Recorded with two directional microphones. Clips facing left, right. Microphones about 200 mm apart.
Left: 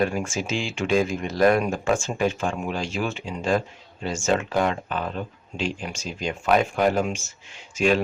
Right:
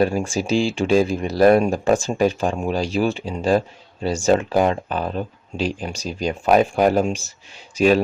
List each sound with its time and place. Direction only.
0.0 s speech: 35° right (ahead or behind)